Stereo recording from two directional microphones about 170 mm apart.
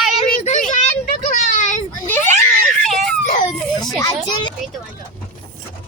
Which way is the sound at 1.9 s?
10° left (ahead or behind).